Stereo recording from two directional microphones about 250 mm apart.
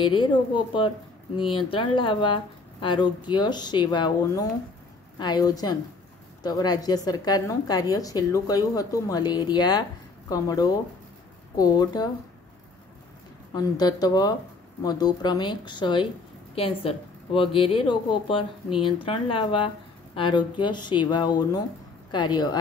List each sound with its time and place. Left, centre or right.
0.0 s a woman's voice: centre
13.5 s a woman's voice: centre